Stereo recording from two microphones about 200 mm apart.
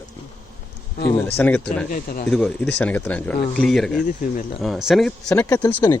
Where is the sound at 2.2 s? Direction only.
5° left (ahead or behind).